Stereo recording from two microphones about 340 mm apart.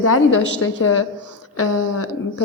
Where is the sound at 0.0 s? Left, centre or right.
Left.